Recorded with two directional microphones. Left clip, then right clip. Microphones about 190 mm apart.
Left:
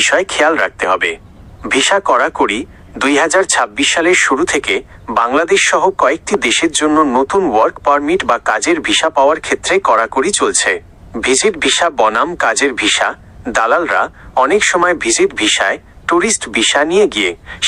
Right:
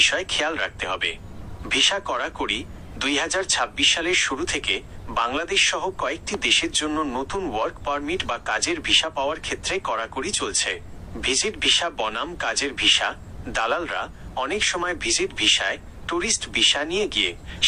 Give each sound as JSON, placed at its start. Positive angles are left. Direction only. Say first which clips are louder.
{"t": 0.0, "sound": "speech", "louder": "left 9 dB", "side_deg": 45}